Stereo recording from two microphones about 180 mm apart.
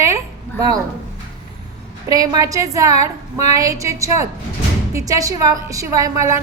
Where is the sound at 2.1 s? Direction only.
20° right (ahead or behind).